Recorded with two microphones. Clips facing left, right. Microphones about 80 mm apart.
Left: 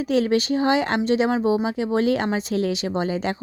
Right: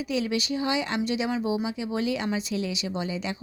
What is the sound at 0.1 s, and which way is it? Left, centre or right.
Speech, left.